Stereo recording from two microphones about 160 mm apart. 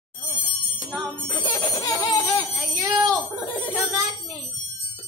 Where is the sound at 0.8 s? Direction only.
5° left (ahead or behind).